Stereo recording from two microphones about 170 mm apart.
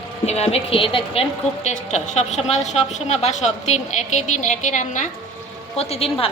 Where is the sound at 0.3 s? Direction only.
40° left (ahead or behind).